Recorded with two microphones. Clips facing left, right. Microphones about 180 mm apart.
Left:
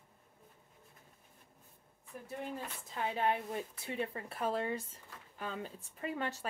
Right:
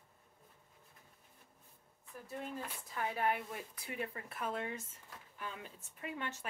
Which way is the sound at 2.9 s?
25° left (ahead or behind).